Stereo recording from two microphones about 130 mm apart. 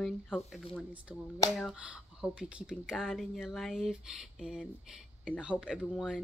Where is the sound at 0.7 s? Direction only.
10° right (ahead or behind).